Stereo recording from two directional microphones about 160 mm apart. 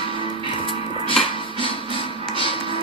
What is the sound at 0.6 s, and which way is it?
Music, 35° left (ahead or behind).